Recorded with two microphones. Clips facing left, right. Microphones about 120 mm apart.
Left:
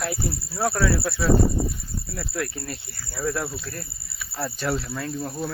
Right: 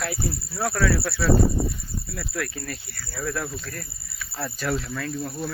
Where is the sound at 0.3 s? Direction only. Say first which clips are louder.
Left 2 dB; 20° left (ahead or behind).